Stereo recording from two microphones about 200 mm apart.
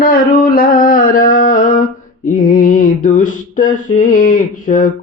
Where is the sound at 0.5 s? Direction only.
45° left (ahead or behind).